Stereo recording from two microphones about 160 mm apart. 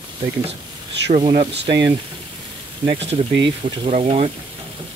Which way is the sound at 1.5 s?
90° right.